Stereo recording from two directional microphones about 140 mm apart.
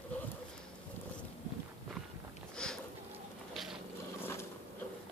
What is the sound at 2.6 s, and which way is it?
Sniff, 5° left (ahead or behind).